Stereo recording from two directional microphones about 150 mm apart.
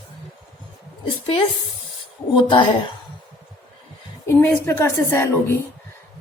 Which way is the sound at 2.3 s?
35° left (ahead or behind).